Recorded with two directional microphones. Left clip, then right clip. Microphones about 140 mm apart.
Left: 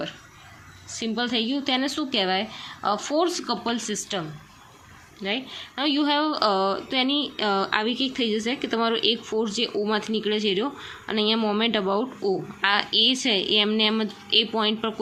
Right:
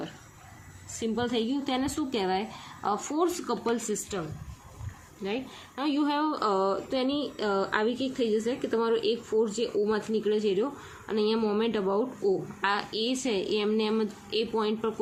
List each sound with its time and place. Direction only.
0.9 s a woman's voice: 5° left (ahead or behind)
5.2 s a woman's voice: 10° left (ahead or behind)